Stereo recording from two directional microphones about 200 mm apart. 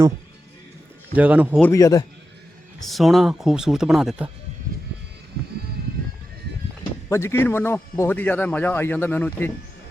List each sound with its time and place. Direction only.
1.1 s a man's voice: 5° right (ahead or behind)
1.6 s speech: 15° left (ahead or behind)
2.8 s speech: centre (ahead or behind)
7.1 s speech: 15° left (ahead or behind)